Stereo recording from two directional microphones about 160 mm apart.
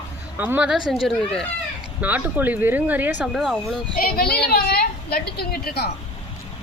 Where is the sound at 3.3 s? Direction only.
5° left (ahead or behind).